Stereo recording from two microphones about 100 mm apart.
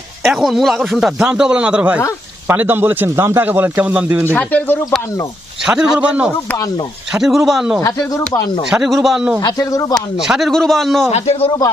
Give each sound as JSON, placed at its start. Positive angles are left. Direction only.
{"t": 0.3, "sound": "a man's voice", "side_deg": 0}
{"t": 4.4, "sound": "speech", "side_deg": 15}
{"t": 5.6, "sound": "a man's voice", "side_deg": -5}
{"t": 7.8, "sound": "speech", "side_deg": 35}
{"t": 8.7, "sound": "a man's voice", "side_deg": -5}
{"t": 9.4, "sound": "speech", "side_deg": 35}
{"t": 10.2, "sound": "a man's voice", "side_deg": -5}
{"t": 11.1, "sound": "a man's voice", "side_deg": 85}